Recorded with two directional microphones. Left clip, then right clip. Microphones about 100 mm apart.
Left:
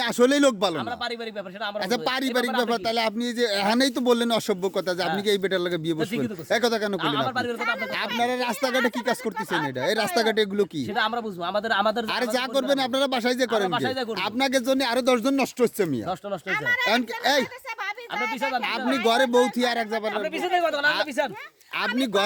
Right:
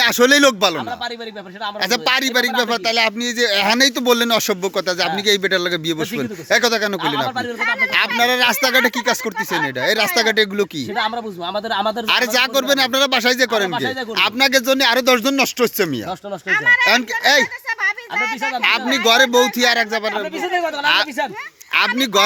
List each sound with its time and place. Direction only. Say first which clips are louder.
0.0 s speech: right 8 dB; 20° left (ahead or behind)
1.8 s speech: right 9 dB; 30° left (ahead or behind)
4.0 s speech: right 6 dB; 20° left (ahead or behind)
8.2 s speech: right 9 dB; 5° left (ahead or behind)
8.6 s speech: right 8 dB; 15° left (ahead or behind); by 12.0 s 35° left (ahead or behind)
12.0 s speech: right 10 dB; 25° left (ahead or behind)
14.8 s speech: right 8 dB; 10° left (ahead or behind)
16.8 s speech: right 8 dB; 30° left (ahead or behind)
18.6 s speech: right 12 dB; 20° left (ahead or behind)
20.4 s speech: right 2 dB; 30° left (ahead or behind)
20.8 s speech: right 6 dB; 15° left (ahead or behind)